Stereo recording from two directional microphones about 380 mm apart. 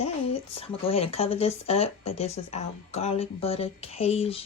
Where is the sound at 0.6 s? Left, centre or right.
Centre.